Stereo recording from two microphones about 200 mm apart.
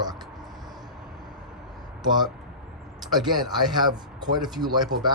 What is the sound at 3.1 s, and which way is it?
Speech, 20° right (ahead or behind).